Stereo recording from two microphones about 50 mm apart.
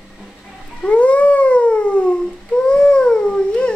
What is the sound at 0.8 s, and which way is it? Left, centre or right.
Dog, left.